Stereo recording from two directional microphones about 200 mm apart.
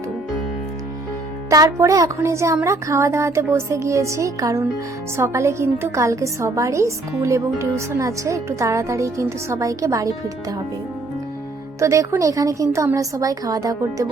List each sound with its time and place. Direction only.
1.5 s a woman's voice: 15° right (ahead or behind)
11.8 s a woman's voice: 15° right (ahead or behind)